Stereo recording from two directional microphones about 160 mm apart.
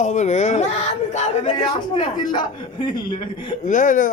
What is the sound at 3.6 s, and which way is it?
Speech, 55° left (ahead or behind).